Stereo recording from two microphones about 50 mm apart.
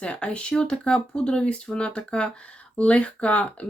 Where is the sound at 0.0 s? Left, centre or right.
Left.